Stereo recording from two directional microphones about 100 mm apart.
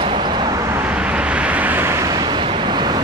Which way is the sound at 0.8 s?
15° right (ahead or behind).